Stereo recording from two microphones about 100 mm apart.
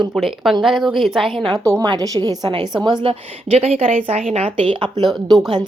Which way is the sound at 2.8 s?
50° right (ahead or behind).